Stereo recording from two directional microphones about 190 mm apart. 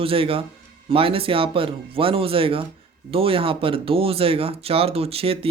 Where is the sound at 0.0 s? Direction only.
30° right (ahead or behind).